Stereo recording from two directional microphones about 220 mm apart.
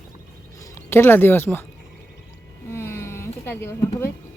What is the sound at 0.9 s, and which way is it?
Speech, 10° left (ahead or behind).